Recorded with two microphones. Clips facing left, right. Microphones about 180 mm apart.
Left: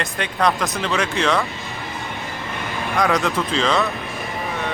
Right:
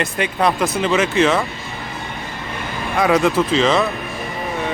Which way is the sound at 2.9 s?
5° right (ahead or behind).